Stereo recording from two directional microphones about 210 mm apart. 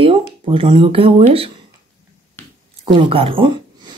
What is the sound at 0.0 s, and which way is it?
Speech, 25° right (ahead or behind).